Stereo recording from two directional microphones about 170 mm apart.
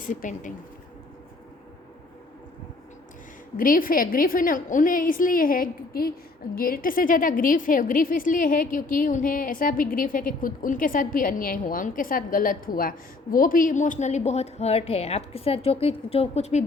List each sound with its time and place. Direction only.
0.0 s a woman's voice: 50° left (ahead or behind)
3.6 s a woman's voice: 55° left (ahead or behind)